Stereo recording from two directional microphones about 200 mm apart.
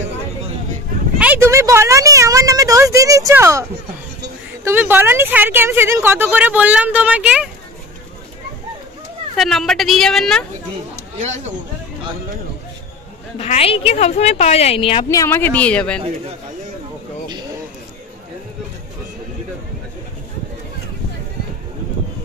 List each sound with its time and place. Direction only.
1.1 s a sound: 5° right (ahead or behind)
4.6 s a woman's voice: 10° right (ahead or behind)
9.4 s a woman's voice: centre (ahead or behind)
11.1 s speech: 35° right (ahead or behind)
13.4 s a woman's voice: 30° left (ahead or behind); by 16.0 s 5° left (ahead or behind)